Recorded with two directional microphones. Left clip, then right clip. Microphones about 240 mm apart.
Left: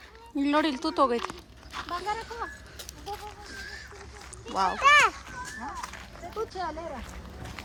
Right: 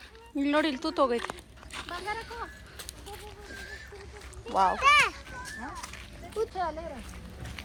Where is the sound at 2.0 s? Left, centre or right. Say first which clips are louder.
Left 3 dB; left.